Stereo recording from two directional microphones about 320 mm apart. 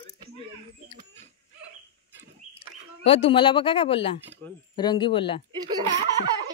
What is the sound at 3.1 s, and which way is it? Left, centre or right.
Speech, centre.